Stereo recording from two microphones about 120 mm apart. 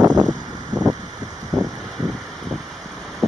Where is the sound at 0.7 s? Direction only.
90° right.